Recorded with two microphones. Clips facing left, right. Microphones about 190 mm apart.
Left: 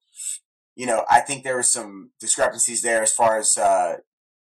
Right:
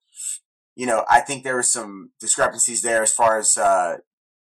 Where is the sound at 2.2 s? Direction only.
10° left (ahead or behind).